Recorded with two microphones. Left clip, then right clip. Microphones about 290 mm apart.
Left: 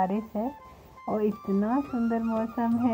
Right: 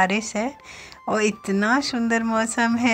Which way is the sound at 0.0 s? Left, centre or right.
Right.